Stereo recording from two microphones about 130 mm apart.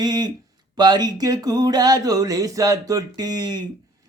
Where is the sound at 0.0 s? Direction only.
30° right (ahead or behind).